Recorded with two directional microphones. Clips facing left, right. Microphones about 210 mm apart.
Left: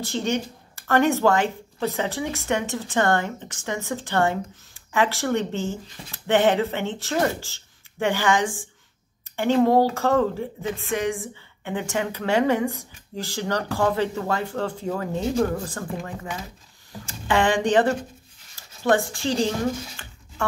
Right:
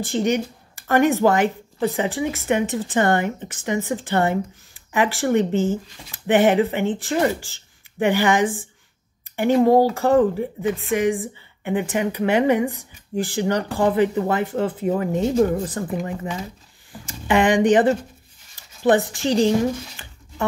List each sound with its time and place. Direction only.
0.0 s speech: 15° right (ahead or behind)
17.3 s speech: 20° right (ahead or behind)
20.0 s a sound: 15° right (ahead or behind)